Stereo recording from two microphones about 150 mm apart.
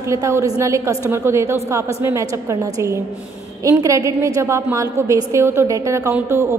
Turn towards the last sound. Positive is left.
turn(degrees=-20)  # may be behind; listen again after turning